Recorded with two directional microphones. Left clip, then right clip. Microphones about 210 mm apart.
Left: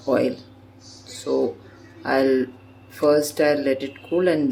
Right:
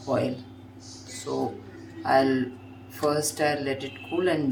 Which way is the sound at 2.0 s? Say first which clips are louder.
Left 2 dB; 35° left (ahead or behind).